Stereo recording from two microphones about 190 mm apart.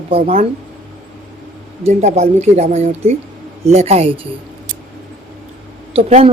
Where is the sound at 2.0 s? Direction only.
35° right (ahead or behind).